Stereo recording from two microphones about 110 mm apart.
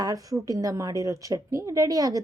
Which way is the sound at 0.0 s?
35° right (ahead or behind).